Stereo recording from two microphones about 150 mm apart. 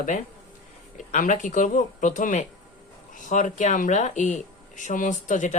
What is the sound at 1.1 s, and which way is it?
Speech, 60° left (ahead or behind).